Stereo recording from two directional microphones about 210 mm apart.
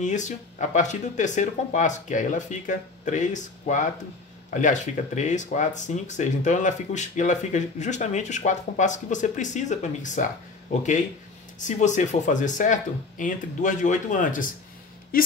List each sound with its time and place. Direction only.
0.0 s speech: 35° left (ahead or behind)